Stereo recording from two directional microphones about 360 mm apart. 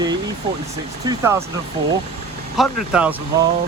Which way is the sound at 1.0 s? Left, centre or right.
Centre.